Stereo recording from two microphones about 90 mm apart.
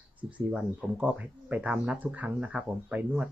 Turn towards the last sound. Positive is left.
turn(degrees=-15)  # may be behind; listen again after turning